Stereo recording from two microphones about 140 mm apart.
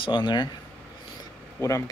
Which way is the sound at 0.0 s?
35° left (ahead or behind).